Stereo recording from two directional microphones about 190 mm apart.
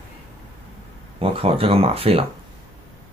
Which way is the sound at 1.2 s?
30° right (ahead or behind).